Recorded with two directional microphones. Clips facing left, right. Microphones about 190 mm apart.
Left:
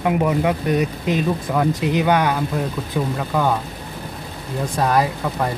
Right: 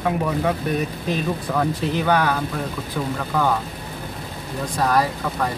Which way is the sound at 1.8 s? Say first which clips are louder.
Left 2 dB; 15° left (ahead or behind).